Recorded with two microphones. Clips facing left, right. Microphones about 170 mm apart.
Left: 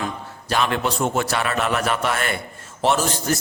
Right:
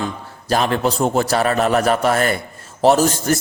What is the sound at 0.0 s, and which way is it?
A man's voice, 40° right (ahead or behind).